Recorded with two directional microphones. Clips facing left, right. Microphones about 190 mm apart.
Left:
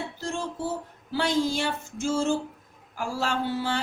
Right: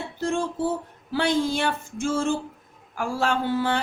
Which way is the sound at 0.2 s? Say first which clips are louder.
Right 8 dB; 55° right (ahead or behind).